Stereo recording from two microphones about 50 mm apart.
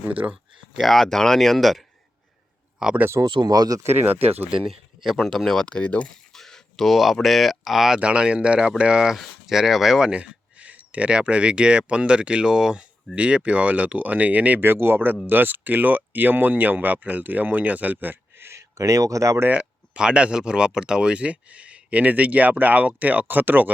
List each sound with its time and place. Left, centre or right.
0.8 s speech: centre
2.8 s speech: centre
3.8 s speech: right
4.6 s speech: centre
5.6 s speech: left
6.3 s speech: centre
7.9 s speech: right
10.1 s speech: right
13.1 s speech: right
14.6 s speech: right
18.5 s speech: right
20.0 s speech: centre; by 23.7 s right